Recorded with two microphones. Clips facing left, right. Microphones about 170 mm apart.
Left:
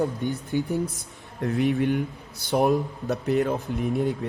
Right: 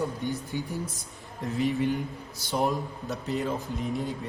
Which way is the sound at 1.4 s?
65° left (ahead or behind).